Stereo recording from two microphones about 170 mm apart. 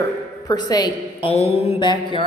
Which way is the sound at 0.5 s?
25° left (ahead or behind).